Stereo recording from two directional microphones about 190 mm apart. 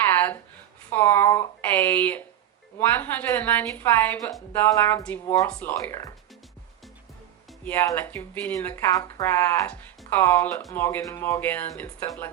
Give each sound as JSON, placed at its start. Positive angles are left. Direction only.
{"t": 0.0, "sound": "a sound", "side_deg": 10}
{"t": 0.9, "sound": "speech", "side_deg": 10}
{"t": 5.5, "sound": "speech", "side_deg": 5}
{"t": 5.8, "sound": "speech", "side_deg": 15}
{"t": 7.6, "sound": "speech", "side_deg": 10}